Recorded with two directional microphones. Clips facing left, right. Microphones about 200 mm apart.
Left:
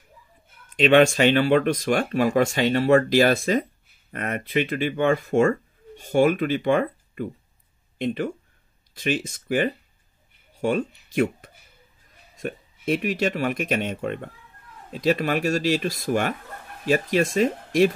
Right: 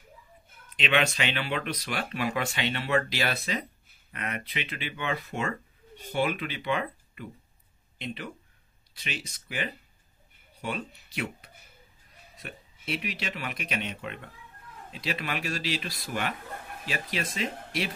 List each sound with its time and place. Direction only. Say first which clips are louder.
0.7 s speech: left 11 dB; 45° left (ahead or behind)